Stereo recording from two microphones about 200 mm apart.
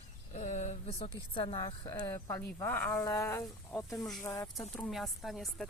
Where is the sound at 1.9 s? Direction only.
10° left (ahead or behind).